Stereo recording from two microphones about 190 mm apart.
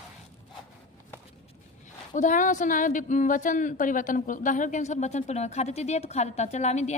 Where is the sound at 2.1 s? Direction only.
40° left (ahead or behind).